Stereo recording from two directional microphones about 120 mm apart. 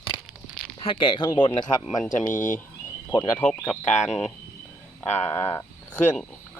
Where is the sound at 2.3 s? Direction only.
90° left.